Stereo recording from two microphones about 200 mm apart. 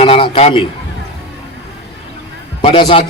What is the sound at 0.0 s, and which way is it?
Speech, 30° left (ahead or behind).